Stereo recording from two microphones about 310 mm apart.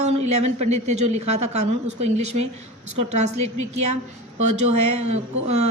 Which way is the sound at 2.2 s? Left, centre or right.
Right.